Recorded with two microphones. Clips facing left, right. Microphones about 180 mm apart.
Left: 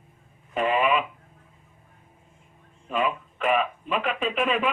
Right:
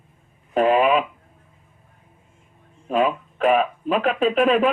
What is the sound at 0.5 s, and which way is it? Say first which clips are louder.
Speech: right 6 dB; 40° right (ahead or behind).